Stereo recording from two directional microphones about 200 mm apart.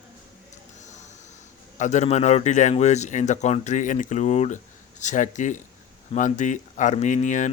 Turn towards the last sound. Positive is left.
turn(degrees=40)  # may be behind; listen again after turning